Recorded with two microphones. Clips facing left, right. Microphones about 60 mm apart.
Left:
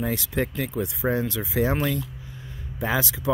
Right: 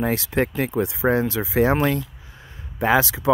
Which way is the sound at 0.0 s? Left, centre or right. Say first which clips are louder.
Right 5 dB; right.